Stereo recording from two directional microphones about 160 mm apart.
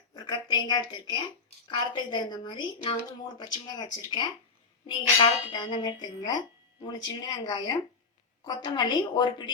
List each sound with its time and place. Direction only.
0.1 s speech: 25° left (ahead or behind)